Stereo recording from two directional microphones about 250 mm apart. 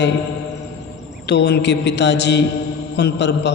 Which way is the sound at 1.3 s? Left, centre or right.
Left.